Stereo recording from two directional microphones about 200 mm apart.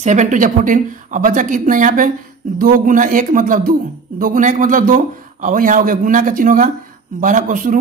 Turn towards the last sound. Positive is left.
turn(degrees=-40)  # may be behind; listen again after turning